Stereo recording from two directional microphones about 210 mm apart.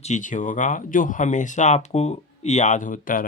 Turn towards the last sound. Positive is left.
turn(degrees=40)  # may be behind; listen again after turning